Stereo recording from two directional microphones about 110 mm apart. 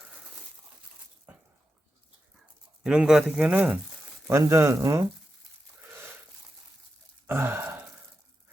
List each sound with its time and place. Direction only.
2.8 s speech: 5° right (ahead or behind)
4.3 s speech: 25° right (ahead or behind)
7.3 s gasp: 20° right (ahead or behind)